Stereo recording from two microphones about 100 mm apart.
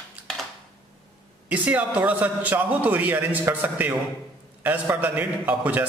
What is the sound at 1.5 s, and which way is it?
A man's voice, 15° right (ahead or behind).